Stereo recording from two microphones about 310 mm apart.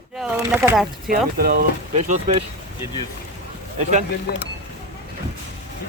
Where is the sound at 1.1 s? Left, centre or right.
Right.